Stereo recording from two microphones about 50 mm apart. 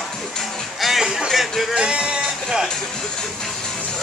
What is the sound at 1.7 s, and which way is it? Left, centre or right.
Music, right.